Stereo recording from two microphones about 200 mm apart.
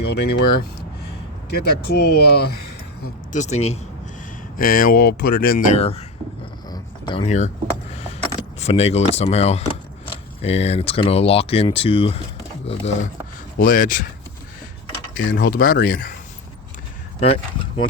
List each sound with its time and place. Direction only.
0.0 s speech: 55° left (ahead or behind)
3.3 s speech: 35° left (ahead or behind)
4.5 s speech: 45° left (ahead or behind)
6.7 s a sound: 25° left (ahead or behind)
8.5 s speech: 30° left (ahead or behind)
13.6 s speech: 45° left (ahead or behind)
15.3 s speech: 50° left (ahead or behind)
17.2 s speech: 30° left (ahead or behind)